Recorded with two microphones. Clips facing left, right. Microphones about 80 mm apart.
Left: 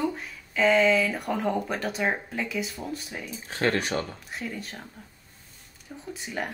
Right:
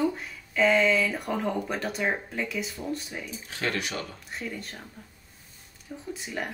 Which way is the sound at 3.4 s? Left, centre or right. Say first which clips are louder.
Left 6 dB; left.